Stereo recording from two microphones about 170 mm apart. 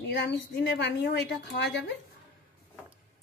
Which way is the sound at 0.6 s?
85° left.